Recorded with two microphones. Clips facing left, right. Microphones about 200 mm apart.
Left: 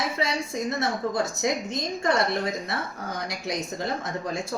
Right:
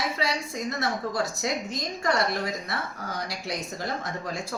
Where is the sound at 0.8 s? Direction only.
20° left (ahead or behind).